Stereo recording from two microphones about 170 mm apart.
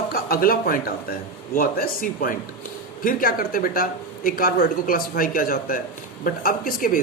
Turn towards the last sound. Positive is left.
turn(degrees=55)  # may be behind; listen again after turning